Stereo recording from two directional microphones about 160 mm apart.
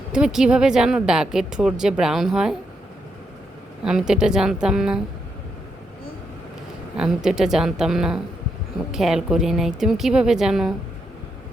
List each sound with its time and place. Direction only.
0.1 s a woman's voice: 5° right (ahead or behind)
3.8 s a woman's voice: 5° right (ahead or behind)
6.9 s a woman's voice: 5° right (ahead or behind)